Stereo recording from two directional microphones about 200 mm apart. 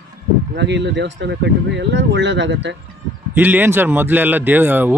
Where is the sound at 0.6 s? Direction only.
60° right (ahead or behind).